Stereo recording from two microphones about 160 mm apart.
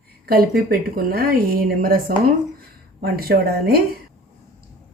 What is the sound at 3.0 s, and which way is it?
Speech, 75° right (ahead or behind).